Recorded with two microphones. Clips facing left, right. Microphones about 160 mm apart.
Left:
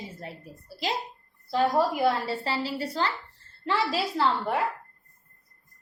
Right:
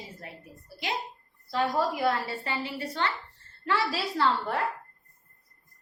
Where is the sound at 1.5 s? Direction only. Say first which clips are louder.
Left 3 dB; 25° left (ahead or behind).